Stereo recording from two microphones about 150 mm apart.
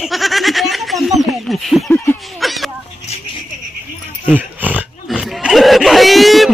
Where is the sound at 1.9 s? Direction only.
15° left (ahead or behind).